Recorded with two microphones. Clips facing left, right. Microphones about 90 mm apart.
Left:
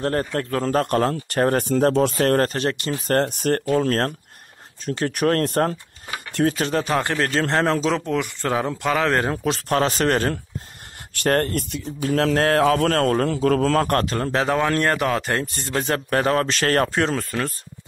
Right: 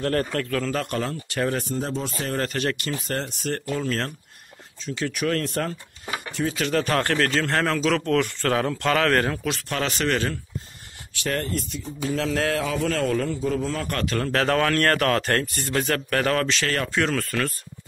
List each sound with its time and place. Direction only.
0.0 s a man's voice: 30° left (ahead or behind); by 1.7 s 45° left (ahead or behind)
1.7 s speech: 65° left (ahead or behind)
2.4 s a man's voice: 30° left (ahead or behind)
3.1 s speech: 55° left (ahead or behind)
6.5 s a man's voice: 35° left (ahead or behind)
6.8 s speech: 15° left (ahead or behind)
7.2 s a man's voice: 30° left (ahead or behind)
9.4 s a man's voice: 35° left (ahead or behind)
13.3 s a man's voice: 75° left (ahead or behind)
13.9 s a man's voice: 30° left (ahead or behind)
14.3 s speech: 15° left (ahead or behind)
15.4 s speech: 25° left (ahead or behind)
16.4 s speech: 45° left (ahead or behind)
17.1 s speech: 25° left (ahead or behind)